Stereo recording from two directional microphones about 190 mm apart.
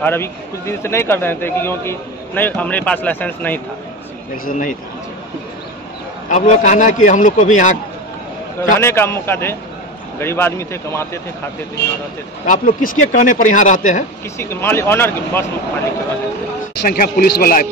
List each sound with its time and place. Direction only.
0.0 s speech: 10° left (ahead or behind)
4.5 s speech: 45° left (ahead or behind)
6.3 s a man's voice: 40° left (ahead or behind)
8.7 s speech: 15° left (ahead or behind)
12.4 s speech: 45° left (ahead or behind)
14.4 s speech: 10° left (ahead or behind)
16.8 s speech: 50° left (ahead or behind)